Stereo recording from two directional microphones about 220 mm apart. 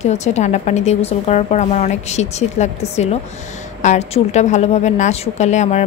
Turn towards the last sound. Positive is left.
turn(degrees=30)  # may be behind; listen again after turning